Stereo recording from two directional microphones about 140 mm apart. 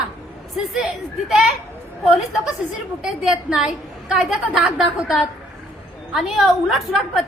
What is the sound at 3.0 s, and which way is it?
A woman's voice, 5° right (ahead or behind).